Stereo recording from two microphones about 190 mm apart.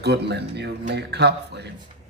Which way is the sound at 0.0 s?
60° right (ahead or behind).